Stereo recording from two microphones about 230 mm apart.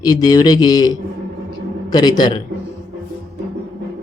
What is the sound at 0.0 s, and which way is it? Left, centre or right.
A man's voice, centre.